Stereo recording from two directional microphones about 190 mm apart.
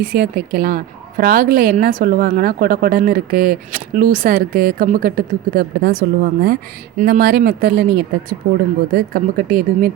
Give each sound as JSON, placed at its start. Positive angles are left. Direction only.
{"t": 0.0, "sound": "speech", "side_deg": -50}
{"t": 8.9, "sound": "speech", "side_deg": -50}